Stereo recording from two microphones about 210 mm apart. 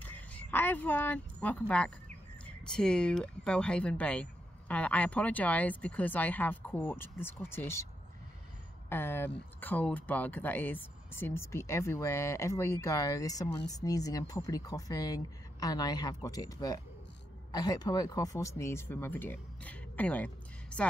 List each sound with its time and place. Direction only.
0.0 s speech: 5° left (ahead or behind)
8.8 s speech: 10° left (ahead or behind)